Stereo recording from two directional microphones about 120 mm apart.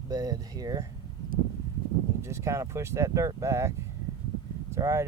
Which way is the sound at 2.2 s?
25° right (ahead or behind).